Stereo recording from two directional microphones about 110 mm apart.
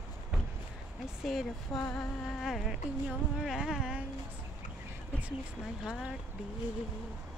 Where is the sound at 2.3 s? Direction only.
Centre (ahead or behind).